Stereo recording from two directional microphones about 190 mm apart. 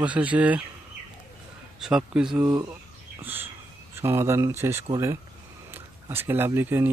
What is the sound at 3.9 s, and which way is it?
Speech, 15° right (ahead or behind).